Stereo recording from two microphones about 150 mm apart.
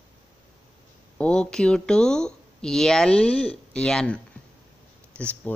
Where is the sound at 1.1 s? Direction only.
5° left (ahead or behind).